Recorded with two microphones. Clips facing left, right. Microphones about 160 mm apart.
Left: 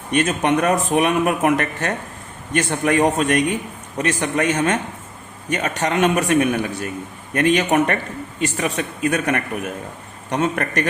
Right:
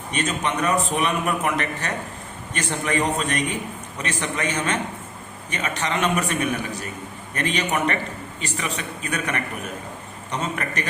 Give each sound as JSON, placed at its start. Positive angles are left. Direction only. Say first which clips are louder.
{"t": 0.1, "sound": "a man's voice", "louder": "left 7 dB", "side_deg": 55}